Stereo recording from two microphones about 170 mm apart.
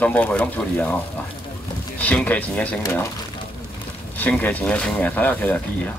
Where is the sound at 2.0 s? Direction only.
10° left (ahead or behind).